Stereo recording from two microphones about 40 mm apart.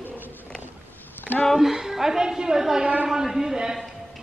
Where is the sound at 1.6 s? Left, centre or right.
Centre.